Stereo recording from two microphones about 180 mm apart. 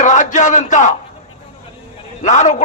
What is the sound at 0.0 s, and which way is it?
Speech, 45° left (ahead or behind).